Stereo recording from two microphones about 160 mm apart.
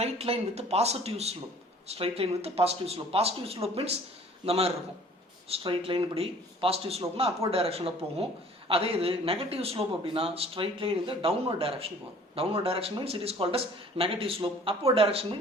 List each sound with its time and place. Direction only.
0.0 s a man's voice: 40° right (ahead or behind)